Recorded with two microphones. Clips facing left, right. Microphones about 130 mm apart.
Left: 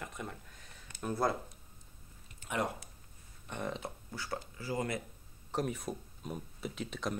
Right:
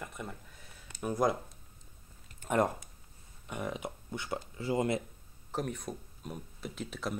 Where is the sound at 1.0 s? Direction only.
15° right (ahead or behind).